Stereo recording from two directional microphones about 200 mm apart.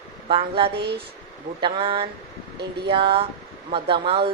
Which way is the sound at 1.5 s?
25° right (ahead or behind).